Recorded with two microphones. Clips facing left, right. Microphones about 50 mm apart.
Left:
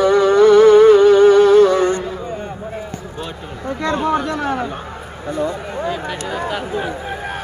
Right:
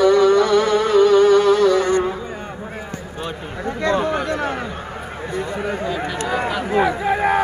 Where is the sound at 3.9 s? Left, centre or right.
Centre.